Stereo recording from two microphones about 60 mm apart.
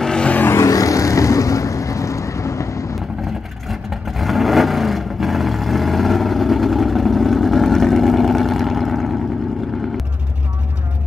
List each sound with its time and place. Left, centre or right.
0.0 s a sound: centre
0.6 s vehicle: left
3.6 s vehicle: centre